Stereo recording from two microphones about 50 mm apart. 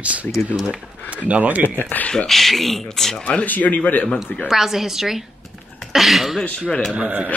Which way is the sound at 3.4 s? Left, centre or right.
Left.